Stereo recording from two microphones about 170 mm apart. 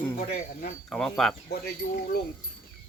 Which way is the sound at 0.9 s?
5° left (ahead or behind).